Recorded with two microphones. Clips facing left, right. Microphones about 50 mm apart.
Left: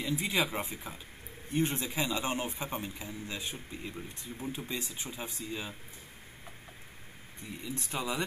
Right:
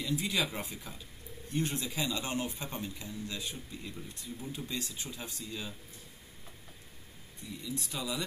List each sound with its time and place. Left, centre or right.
0.1 s a man's voice: left
7.3 s speech: left